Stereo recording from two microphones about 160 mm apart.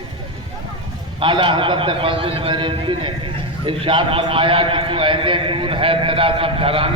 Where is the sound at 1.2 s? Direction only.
30° right (ahead or behind).